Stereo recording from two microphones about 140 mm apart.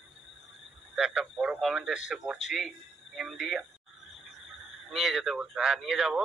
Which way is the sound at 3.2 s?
Centre (ahead or behind).